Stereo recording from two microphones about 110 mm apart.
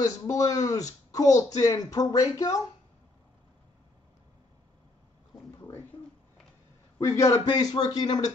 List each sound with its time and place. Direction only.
0.0 s speech: 30° left (ahead or behind)
5.6 s a sound: 20° left (ahead or behind)
7.0 s speech: 30° left (ahead or behind)